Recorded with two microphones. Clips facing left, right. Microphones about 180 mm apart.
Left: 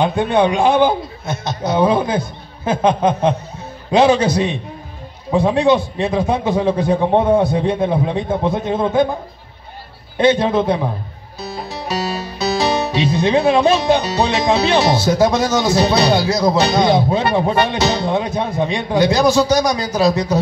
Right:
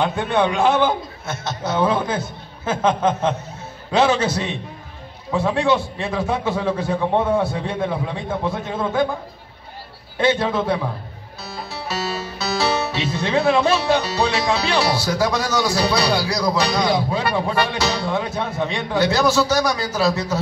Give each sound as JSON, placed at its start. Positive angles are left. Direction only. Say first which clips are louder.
{"t": 0.0, "sound": "music", "louder": "left 4 dB", "side_deg": 15}
{"t": 5.3, "sound": "a man's voice", "louder": "left 5 dB", "side_deg": 15}
{"t": 10.1, "sound": "a man's voice", "louder": "left 5 dB", "side_deg": 20}
{"t": 11.4, "sound": "music", "louder": "left 5 dB", "side_deg": 15}